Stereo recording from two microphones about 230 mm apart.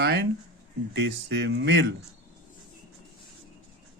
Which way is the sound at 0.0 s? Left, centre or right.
Right.